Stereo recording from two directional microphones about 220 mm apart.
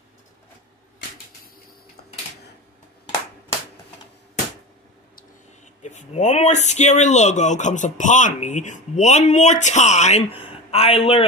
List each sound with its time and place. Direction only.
5.8 s speech: 30° left (ahead or behind)